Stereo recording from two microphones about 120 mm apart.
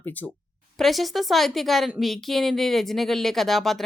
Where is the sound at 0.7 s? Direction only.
Centre (ahead or behind).